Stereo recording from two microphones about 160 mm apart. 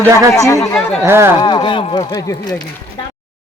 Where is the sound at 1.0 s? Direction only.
15° right (ahead or behind).